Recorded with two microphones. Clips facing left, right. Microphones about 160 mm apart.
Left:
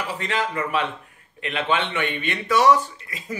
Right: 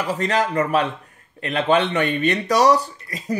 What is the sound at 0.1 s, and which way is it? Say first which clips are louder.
Speech: right 7 dB; 40° right (ahead or behind).